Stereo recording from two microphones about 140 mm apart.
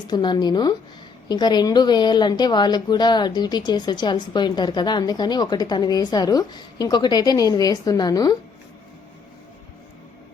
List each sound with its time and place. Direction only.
0.1 s a woman's voice: 30° left (ahead or behind)